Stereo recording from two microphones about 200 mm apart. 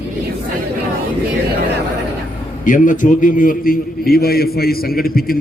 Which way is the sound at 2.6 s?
40° left (ahead or behind).